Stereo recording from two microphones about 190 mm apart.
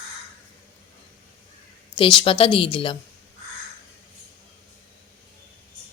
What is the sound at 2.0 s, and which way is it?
Speech, 25° left (ahead or behind).